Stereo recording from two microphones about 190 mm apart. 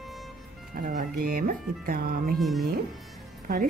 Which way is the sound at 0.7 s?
45° right (ahead or behind).